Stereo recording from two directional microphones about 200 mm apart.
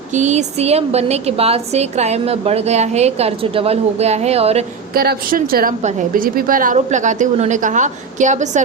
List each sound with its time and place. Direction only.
0.1 s a woman's voice: 35° right (ahead or behind)
4.9 s a woman's voice: 50° right (ahead or behind)